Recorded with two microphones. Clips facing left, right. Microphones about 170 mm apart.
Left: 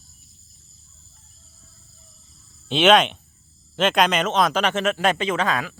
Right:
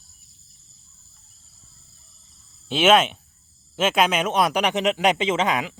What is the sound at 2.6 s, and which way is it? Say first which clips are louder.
Speech: left 1 dB; 5° right (ahead or behind).